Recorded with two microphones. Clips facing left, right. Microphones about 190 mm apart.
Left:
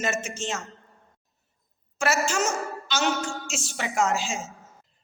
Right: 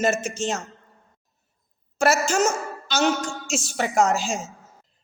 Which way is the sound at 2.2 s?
45° right (ahead or behind).